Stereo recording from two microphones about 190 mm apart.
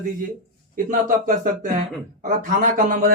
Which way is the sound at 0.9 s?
40° right (ahead or behind).